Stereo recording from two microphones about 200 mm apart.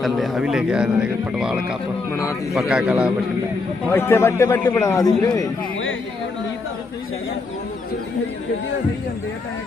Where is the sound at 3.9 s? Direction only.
10° left (ahead or behind).